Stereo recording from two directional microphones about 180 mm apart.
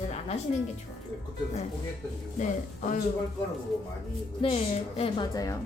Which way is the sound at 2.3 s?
45° left (ahead or behind).